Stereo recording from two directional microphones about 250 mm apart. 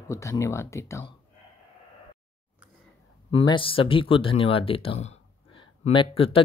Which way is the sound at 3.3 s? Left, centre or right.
Left.